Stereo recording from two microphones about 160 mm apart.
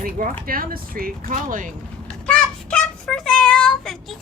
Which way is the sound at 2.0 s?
5° left (ahead or behind).